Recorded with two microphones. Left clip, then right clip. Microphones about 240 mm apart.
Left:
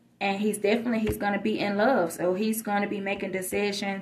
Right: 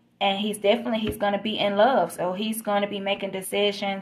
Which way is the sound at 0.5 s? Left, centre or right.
Right.